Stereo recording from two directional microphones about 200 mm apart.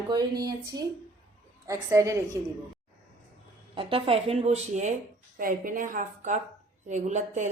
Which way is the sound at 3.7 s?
25° right (ahead or behind).